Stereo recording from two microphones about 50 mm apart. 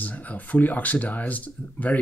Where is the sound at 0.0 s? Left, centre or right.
Left.